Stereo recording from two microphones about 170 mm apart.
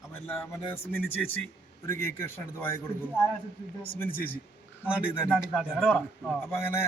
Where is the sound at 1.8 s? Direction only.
15° left (ahead or behind).